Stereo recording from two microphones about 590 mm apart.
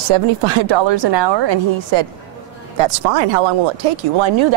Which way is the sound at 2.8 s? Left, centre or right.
Right.